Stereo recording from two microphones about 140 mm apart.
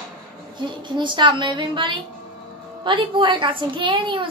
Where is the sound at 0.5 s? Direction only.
35° right (ahead or behind).